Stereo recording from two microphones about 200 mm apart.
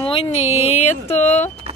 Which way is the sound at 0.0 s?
25° left (ahead or behind).